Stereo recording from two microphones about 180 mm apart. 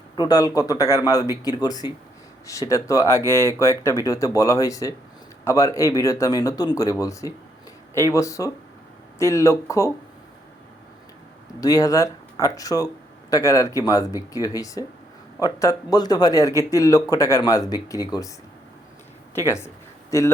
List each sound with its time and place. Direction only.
0.2 s a man's voice: 20° left (ahead or behind)
11.6 s a man's voice: 20° left (ahead or behind)
19.5 s a sound: 15° left (ahead or behind)